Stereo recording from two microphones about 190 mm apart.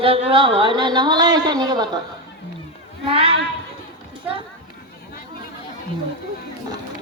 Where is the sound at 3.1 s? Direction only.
30° right (ahead or behind).